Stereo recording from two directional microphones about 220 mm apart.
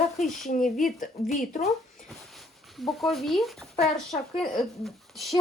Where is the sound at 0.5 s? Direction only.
35° left (ahead or behind).